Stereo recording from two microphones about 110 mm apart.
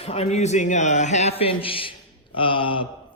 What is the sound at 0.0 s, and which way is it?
A man's voice, 70° left (ahead or behind).